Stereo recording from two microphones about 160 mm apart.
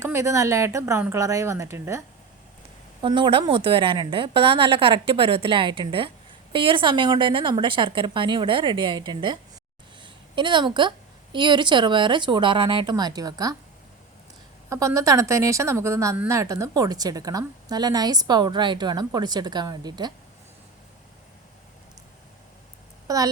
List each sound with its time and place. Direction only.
0.0 s a woman's voice: 15° right (ahead or behind)
3.0 s a woman's voice: 30° right (ahead or behind)
14.7 s a woman's voice: 20° right (ahead or behind)
23.0 s a woman's voice: 20° right (ahead or behind)